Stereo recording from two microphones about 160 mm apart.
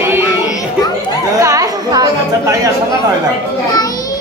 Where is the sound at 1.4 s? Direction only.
20° right (ahead or behind).